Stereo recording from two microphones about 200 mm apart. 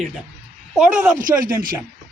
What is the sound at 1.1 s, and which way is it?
Speech, 45° right (ahead or behind).